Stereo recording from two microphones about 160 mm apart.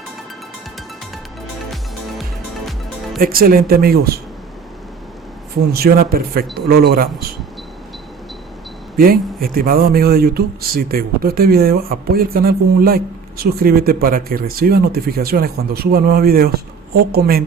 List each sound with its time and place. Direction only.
3.2 s speech: 65° right (ahead or behind)
5.7 s speech: 70° right (ahead or behind)
9.0 s speech: 65° right (ahead or behind)